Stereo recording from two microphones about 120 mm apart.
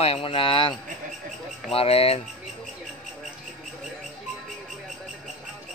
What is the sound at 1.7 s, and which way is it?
Speech, 55° left (ahead or behind).